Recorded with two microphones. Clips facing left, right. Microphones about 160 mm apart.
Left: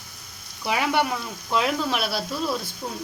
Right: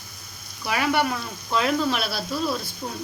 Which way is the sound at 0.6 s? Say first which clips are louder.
Even; 15° left (ahead or behind).